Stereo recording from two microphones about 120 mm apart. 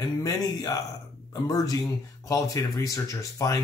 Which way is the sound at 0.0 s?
30° left (ahead or behind).